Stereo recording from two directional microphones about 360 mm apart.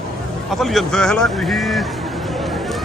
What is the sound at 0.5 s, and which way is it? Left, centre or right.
Vehicle, centre.